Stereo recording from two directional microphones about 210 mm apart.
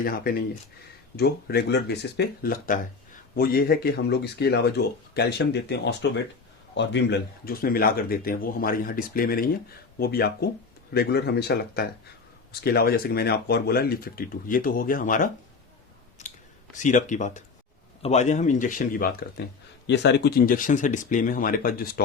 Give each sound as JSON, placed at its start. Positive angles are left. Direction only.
{"t": 0.0, "sound": "speech", "side_deg": 45}
{"t": 16.2, "sound": "clicking", "side_deg": 35}
{"t": 16.7, "sound": "speech", "side_deg": 35}
{"t": 19.9, "sound": "speech", "side_deg": 55}